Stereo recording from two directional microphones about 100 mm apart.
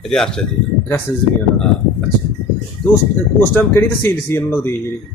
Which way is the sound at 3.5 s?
25° left (ahead or behind).